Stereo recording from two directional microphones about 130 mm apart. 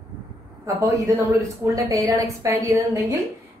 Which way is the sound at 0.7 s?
25° right (ahead or behind).